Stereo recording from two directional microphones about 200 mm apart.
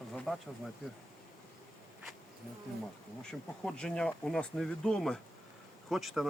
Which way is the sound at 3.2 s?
5° left (ahead or behind).